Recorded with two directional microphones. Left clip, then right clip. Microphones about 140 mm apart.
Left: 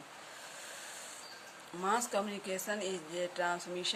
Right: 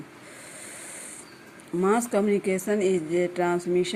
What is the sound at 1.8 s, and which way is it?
Speech, 35° right (ahead or behind).